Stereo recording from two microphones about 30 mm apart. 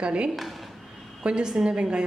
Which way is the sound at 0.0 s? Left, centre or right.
Right.